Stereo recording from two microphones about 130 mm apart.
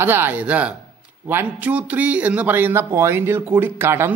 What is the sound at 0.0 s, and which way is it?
A man's voice, 15° right (ahead or behind).